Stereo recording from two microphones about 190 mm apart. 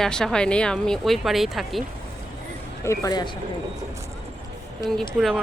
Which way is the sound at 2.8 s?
15° left (ahead or behind).